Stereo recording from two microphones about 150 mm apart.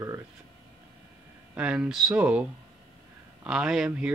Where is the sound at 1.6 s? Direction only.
5° right (ahead or behind).